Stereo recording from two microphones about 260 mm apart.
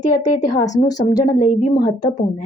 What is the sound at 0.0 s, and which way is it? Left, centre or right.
Speech, centre.